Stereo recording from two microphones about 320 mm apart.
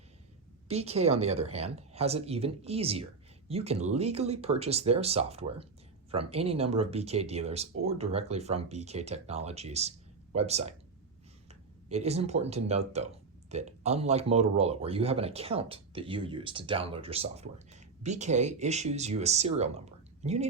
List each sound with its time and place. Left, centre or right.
0.7 s speech: centre